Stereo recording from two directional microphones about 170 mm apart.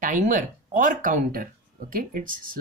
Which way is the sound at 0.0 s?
50° right (ahead or behind).